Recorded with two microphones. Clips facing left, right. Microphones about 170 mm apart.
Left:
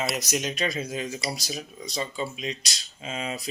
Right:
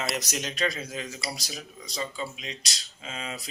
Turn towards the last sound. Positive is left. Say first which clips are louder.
# left 5 dB
turn(degrees=20)  # may be behind; listen again after turning